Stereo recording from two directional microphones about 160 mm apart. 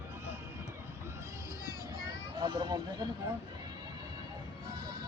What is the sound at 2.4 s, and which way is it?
Speech, 25° right (ahead or behind).